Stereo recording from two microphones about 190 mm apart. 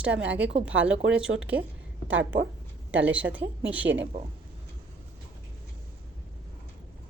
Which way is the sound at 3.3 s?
10° right (ahead or behind).